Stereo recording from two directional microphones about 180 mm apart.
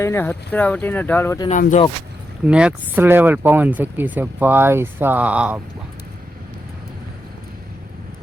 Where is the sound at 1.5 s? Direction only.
45° left (ahead or behind).